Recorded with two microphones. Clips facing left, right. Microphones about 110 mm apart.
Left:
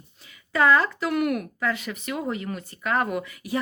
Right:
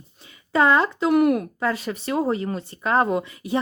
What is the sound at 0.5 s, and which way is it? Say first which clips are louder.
Speech: right 2 dB; 25° right (ahead or behind).